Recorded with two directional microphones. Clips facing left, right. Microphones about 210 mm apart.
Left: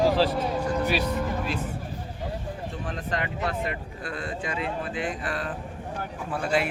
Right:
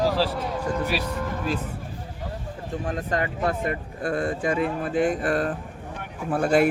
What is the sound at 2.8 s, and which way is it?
Speech, 45° right (ahead or behind).